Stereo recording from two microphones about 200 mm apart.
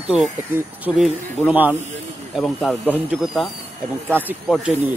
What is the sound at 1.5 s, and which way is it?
Speech, 10° right (ahead or behind).